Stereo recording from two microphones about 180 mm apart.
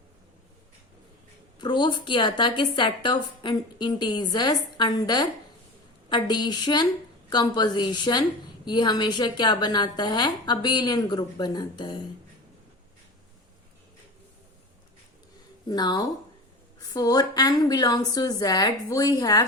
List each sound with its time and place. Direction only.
1.5 s a woman's voice: 25° left (ahead or behind)
15.7 s a woman's voice: 20° left (ahead or behind)